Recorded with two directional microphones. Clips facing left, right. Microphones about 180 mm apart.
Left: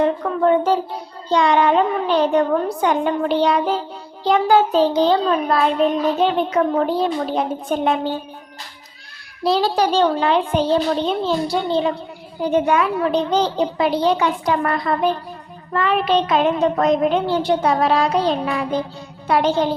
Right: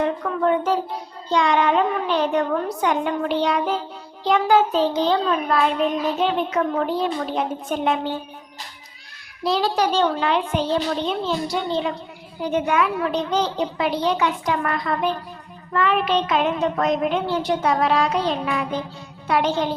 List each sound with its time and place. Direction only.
0.0 s music: 30° left (ahead or behind)
1.3 s a child's voice: 35° left (ahead or behind)
9.4 s a child's voice: 35° left (ahead or behind)